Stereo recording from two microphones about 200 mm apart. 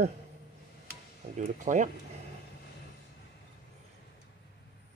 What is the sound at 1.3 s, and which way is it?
Speech, 40° right (ahead or behind).